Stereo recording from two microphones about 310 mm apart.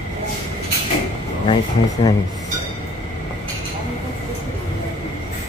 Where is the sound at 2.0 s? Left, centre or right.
Centre.